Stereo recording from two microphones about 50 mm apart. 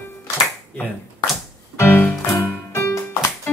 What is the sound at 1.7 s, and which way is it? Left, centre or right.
Music, left.